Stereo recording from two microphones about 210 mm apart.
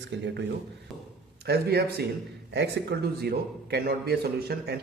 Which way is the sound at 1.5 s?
50° right (ahead or behind).